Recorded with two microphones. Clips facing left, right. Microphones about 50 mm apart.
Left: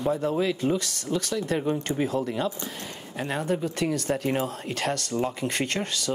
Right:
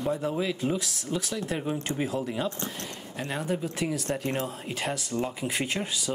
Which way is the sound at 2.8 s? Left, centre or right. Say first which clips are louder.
Left 2 dB; centre.